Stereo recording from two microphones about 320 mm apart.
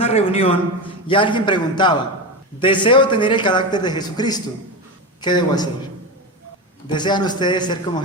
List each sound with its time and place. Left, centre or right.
0.0 s a man's voice: centre
6.8 s a man's voice: centre